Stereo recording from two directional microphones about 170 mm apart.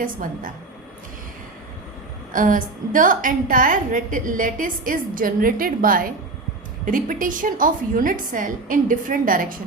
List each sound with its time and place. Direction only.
0.0 s a woman's voice: 55° right (ahead or behind)
2.3 s a woman's voice: 50° right (ahead or behind)